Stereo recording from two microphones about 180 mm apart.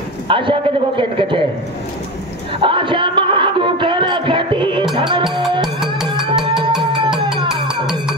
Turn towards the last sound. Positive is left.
turn(degrees=-5)  # may be behind; listen again after turning